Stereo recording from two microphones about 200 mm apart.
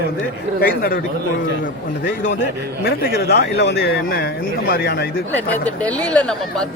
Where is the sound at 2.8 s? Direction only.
55° left (ahead or behind).